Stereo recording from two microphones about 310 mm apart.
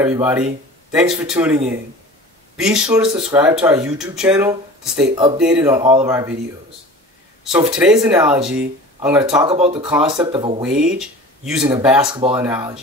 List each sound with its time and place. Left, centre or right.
0.0 s speech: centre
5.4 s speech: centre
7.4 s speech: centre
9.5 s speech: centre
9.8 s speech: centre
10.1 s speech: centre
10.6 s speech: centre
12.1 s speech: centre
12.4 s speech: centre